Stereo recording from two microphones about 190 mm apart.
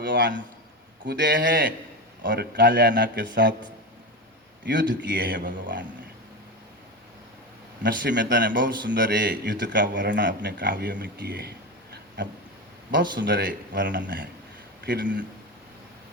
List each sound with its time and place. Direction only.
0.0 s a man's voice: 65° right (ahead or behind)
1.0 s speech: 55° right (ahead or behind)
4.6 s speech: 65° right (ahead or behind); by 5.5 s 50° right (ahead or behind)
8.0 s speech: 65° right (ahead or behind)
13.0 s a man's voice: 65° right (ahead or behind)